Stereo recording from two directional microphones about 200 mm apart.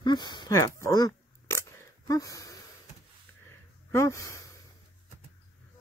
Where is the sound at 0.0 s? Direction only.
20° left (ahead or behind).